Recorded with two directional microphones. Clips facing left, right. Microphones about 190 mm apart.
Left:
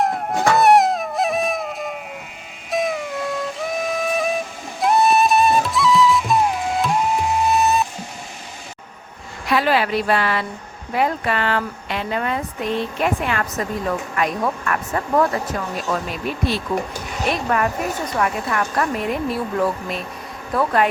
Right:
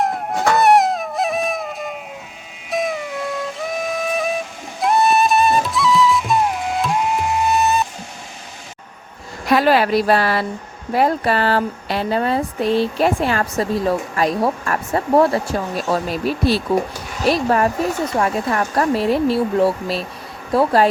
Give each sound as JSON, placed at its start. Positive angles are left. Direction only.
{"t": 0.0, "sound": "music", "side_deg": 0}
{"t": 9.5, "sound": "speech", "side_deg": -40}